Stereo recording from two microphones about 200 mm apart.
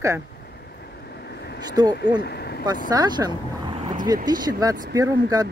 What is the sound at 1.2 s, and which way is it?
Vehicle, 55° left (ahead or behind).